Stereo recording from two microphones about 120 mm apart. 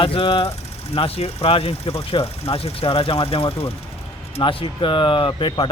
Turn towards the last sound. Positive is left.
turn(degrees=45)  # may be behind; listen again after turning